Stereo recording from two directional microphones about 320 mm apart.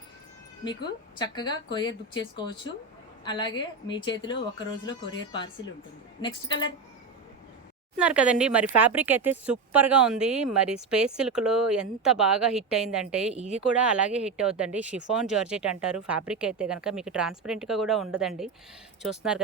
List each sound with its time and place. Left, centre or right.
0.6 s speech: centre
3.2 s speech: centre
7.9 s speech: centre